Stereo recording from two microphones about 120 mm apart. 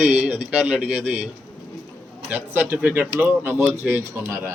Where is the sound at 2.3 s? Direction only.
15° right (ahead or behind).